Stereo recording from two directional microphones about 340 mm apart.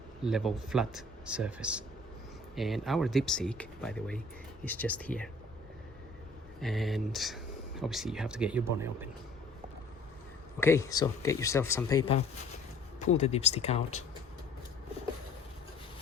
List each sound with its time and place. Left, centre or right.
0.3 s speech: centre
6.6 s speech: centre
10.6 s speech: centre